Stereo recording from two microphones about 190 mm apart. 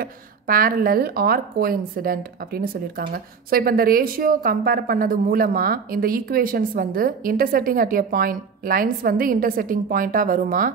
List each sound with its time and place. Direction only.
0.0 s a woman's voice: 50° right (ahead or behind)